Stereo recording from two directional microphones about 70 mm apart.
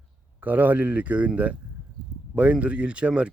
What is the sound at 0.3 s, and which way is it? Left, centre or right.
Speech, right.